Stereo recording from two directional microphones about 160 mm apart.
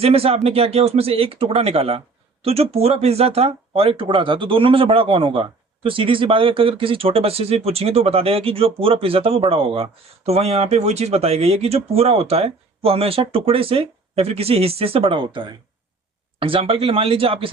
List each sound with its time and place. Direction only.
0.0 s speech: 35° right (ahead or behind)